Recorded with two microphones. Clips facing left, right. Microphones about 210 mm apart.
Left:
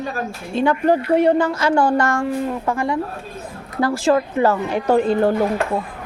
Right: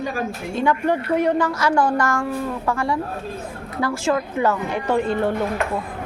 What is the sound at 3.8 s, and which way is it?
Speech, 35° left (ahead or behind).